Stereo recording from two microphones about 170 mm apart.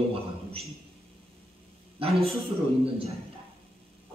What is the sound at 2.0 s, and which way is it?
Speech, 35° right (ahead or behind).